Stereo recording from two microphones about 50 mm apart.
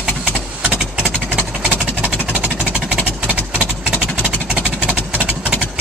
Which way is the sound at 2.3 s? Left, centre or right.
Right.